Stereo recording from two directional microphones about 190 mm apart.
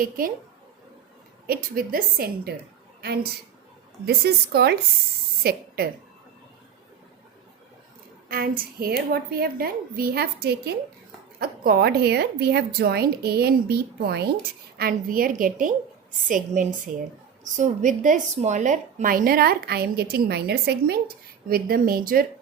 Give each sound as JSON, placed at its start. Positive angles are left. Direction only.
{"t": 1.5, "sound": "a woman's voice", "side_deg": -50}
{"t": 4.0, "sound": "a woman's voice", "side_deg": -55}
{"t": 8.3, "sound": "a woman's voice", "side_deg": -50}